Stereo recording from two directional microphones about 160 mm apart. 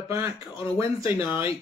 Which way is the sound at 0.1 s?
15° right (ahead or behind).